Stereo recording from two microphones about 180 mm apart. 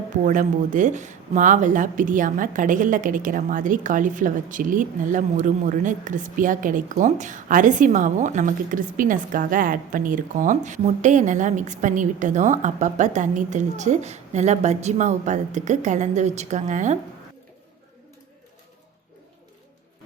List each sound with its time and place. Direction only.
0.3 s a woman's voice: 45° right (ahead or behind)